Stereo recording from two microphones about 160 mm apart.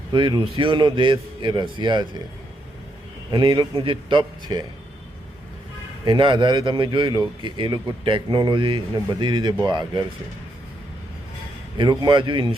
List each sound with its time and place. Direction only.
0.1 s a man's voice: 30° right (ahead or behind)
3.3 s a man's voice: 30° right (ahead or behind)
6.1 s a man's voice: 30° right (ahead or behind)
12.0 s a man's voice: 30° right (ahead or behind)